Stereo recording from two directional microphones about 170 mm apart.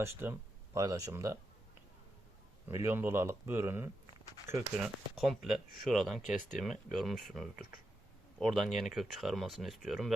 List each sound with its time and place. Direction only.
0.0 s speech: 15° right (ahead or behind)
2.6 s speech: 15° right (ahead or behind)
4.8 s speech: centre (ahead or behind)